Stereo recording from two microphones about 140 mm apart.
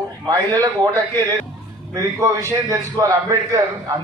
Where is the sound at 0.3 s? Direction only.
25° right (ahead or behind).